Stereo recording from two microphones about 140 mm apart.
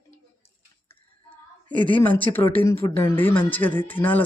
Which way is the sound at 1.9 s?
10° left (ahead or behind).